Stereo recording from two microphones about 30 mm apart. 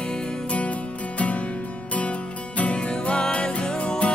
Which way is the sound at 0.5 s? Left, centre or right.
Left.